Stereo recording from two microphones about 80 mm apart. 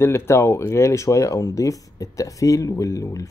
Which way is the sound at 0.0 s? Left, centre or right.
Left.